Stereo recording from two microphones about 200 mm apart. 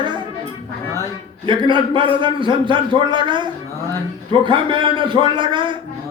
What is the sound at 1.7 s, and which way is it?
A man's voice, 25° right (ahead or behind).